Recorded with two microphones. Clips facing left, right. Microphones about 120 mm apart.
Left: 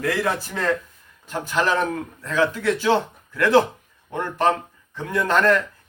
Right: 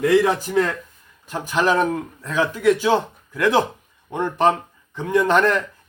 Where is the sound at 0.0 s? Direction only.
15° right (ahead or behind).